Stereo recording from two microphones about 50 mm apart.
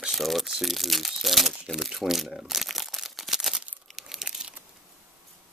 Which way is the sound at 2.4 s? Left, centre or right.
Centre.